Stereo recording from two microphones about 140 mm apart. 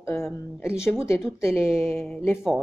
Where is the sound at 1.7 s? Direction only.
Centre (ahead or behind).